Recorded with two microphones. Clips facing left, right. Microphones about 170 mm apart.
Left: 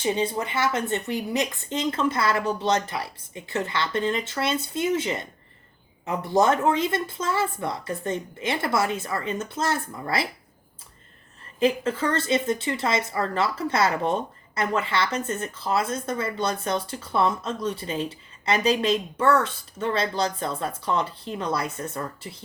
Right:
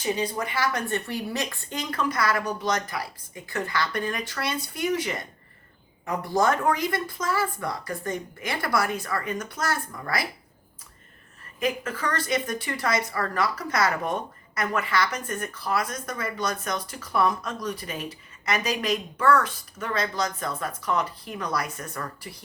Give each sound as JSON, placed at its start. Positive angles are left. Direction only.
{"t": 0.0, "sound": "a woman's voice", "side_deg": 25}
{"t": 11.6, "sound": "a woman's voice", "side_deg": 25}